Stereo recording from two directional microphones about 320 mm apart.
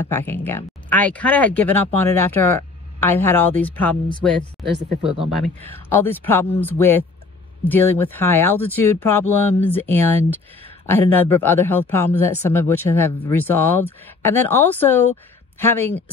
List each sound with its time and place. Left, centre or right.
0.0 s speech: centre